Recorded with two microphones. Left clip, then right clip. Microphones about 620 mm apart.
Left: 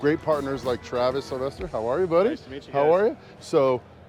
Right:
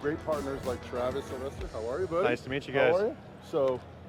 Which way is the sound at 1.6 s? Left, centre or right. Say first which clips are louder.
Left 8 dB; centre.